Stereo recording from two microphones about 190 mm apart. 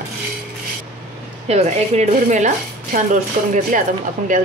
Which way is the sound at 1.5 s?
35° right (ahead or behind).